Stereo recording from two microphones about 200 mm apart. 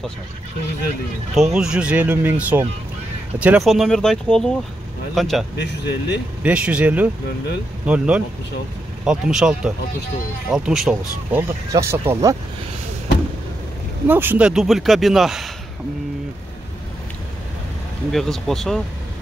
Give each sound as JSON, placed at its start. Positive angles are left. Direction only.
{"t": 1.3, "sound": "speech", "side_deg": 0}
{"t": 5.6, "sound": "speech", "side_deg": 60}
{"t": 6.4, "sound": "speech", "side_deg": -5}
{"t": 11.7, "sound": "speech", "side_deg": -15}
{"t": 14.0, "sound": "speech", "side_deg": -10}
{"t": 18.1, "sound": "speech", "side_deg": 0}